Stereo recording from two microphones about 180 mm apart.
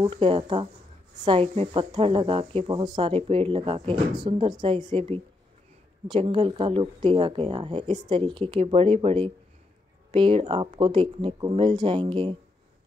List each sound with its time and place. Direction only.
0.0 s speech: 30° right (ahead or behind)
4.8 s a woman's voice: 35° right (ahead or behind)
6.2 s speech: 30° right (ahead or behind)